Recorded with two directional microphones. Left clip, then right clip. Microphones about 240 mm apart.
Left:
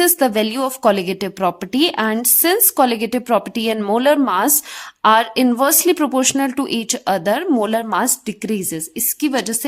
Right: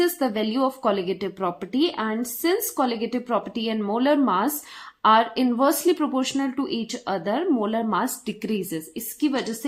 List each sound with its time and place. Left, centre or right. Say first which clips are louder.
0.0 s a woman's voice: left 7 dB; left